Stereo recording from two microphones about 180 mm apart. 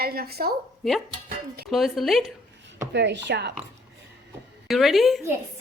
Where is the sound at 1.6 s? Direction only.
Centre (ahead or behind).